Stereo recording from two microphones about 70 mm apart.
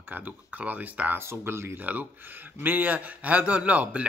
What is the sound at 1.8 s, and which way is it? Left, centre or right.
Speech, right.